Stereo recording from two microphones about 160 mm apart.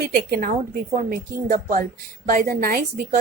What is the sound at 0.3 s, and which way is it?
A woman's voice, 60° right (ahead or behind).